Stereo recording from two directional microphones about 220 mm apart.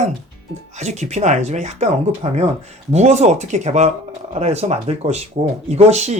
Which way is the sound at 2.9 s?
30° right (ahead or behind).